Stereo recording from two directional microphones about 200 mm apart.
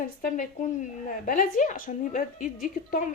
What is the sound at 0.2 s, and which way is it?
A woman's voice, 40° left (ahead or behind).